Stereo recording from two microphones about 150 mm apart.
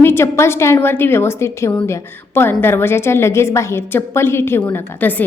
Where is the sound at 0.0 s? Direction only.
15° left (ahead or behind).